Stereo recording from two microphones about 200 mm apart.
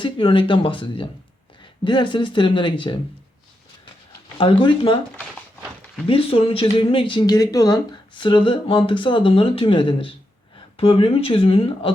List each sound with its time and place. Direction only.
0.0 s speech: 25° left (ahead or behind)
4.4 s speech: 25° left (ahead or behind)
6.1 s speech: 30° left (ahead or behind)